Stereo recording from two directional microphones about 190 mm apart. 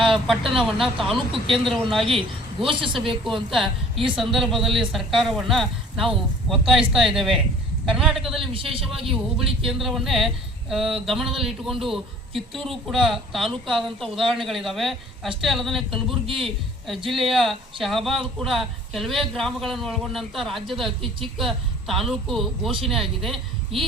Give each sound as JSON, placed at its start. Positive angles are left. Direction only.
{"t": 0.0, "sound": "speech", "side_deg": 0}
{"t": 2.0, "sound": "a man's voice", "side_deg": -30}
{"t": 3.2, "sound": "speech", "side_deg": 0}
{"t": 8.7, "sound": "a man's voice", "side_deg": -30}
{"t": 9.0, "sound": "a man's voice", "side_deg": 0}